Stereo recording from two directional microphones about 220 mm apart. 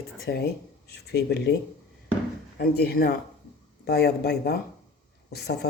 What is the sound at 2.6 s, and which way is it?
Speech, 45° left (ahead or behind).